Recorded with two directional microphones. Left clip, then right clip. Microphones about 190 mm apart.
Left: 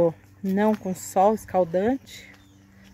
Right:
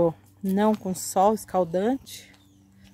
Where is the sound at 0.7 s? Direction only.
10° right (ahead or behind).